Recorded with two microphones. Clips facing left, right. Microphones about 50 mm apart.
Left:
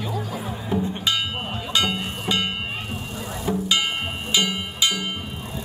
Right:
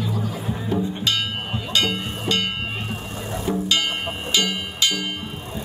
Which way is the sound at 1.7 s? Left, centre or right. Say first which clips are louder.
Right 1 dB; centre.